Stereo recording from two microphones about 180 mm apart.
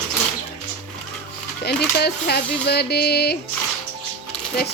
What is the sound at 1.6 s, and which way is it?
A woman's voice, 65° left (ahead or behind).